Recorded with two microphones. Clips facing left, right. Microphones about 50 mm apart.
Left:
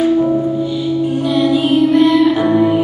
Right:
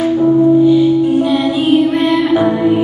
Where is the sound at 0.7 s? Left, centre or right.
Right.